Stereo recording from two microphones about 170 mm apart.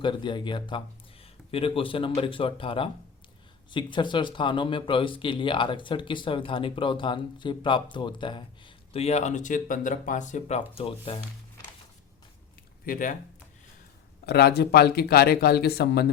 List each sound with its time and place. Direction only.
0.0 s speech: 25° left (ahead or behind)
12.8 s speech: 55° left (ahead or behind)
14.3 s speech: 70° left (ahead or behind)